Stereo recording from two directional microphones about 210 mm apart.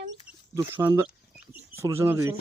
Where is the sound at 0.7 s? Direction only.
10° right (ahead or behind).